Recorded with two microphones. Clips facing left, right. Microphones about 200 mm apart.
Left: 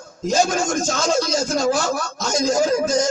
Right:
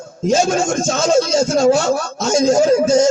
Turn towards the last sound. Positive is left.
turn(degrees=-25)  # may be behind; listen again after turning